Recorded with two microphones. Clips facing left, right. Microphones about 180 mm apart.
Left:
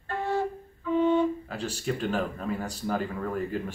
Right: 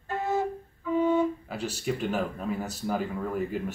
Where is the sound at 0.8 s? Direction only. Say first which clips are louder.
Left 1 dB; 10° right (ahead or behind).